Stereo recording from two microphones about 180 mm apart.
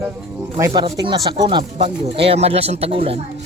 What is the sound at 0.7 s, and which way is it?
Speech, 30° right (ahead or behind).